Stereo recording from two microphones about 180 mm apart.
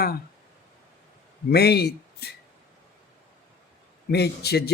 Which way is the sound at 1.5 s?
65° left (ahead or behind).